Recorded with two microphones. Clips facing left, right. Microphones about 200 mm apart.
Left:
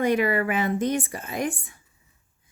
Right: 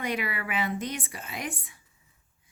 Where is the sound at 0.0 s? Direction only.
45° left (ahead or behind).